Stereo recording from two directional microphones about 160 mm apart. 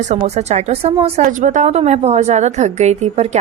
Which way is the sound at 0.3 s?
40° right (ahead or behind).